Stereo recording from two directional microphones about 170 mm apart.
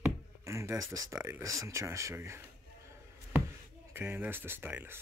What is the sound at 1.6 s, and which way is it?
Speech, 15° right (ahead or behind).